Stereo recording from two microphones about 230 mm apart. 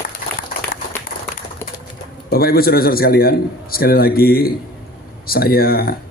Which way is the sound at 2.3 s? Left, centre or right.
Left.